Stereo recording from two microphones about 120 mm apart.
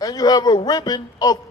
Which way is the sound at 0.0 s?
35° left (ahead or behind).